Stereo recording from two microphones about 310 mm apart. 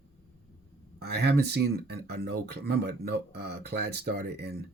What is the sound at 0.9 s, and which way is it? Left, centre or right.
Speech, right.